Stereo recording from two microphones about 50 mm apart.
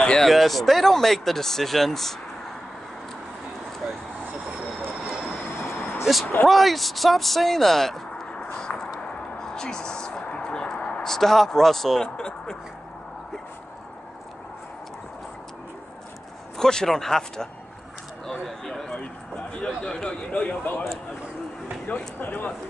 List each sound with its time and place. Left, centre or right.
0.0 s a sound: centre
0.3 s speech: centre
3.8 s vehicle: right
5.3 s train: left
6.4 s speech: centre
8.3 s a sound: centre
11.0 s speech: centre
12.2 s a sound: centre
16.5 s speech: centre
18.2 s a sound: centre
19.8 s speech: centre
20.2 s speech: left
22.2 s speech: left